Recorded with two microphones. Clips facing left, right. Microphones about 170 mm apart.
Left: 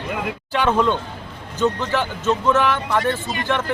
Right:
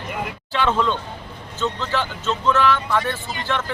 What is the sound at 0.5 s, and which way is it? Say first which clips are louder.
Speech: left 2 dB; 15° left (ahead or behind).